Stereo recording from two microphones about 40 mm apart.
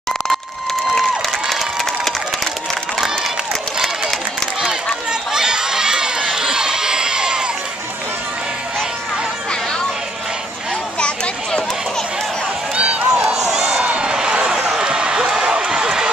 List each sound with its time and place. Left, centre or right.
1.5 s crowd: centre
5.3 s crowd: centre
11.0 s a sound: left
12.7 s run: right
13.3 s a sound: centre
14.7 s basketball bounce: centre